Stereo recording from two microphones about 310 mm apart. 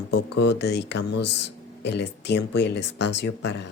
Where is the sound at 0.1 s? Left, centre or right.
Left.